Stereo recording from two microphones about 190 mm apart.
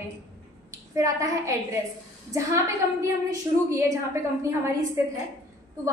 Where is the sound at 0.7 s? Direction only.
15° right (ahead or behind).